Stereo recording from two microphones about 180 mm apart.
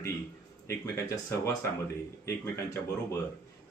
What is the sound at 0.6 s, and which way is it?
Speech, 15° left (ahead or behind).